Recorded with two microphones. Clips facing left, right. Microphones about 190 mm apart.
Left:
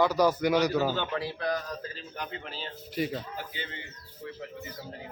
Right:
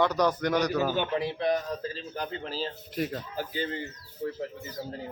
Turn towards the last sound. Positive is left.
turn(degrees=-40)  # may be behind; listen again after turning